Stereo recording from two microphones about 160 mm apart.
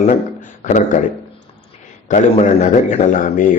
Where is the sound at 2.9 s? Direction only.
50° left (ahead or behind).